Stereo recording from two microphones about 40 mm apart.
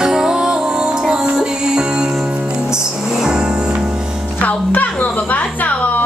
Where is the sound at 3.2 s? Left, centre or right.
Centre.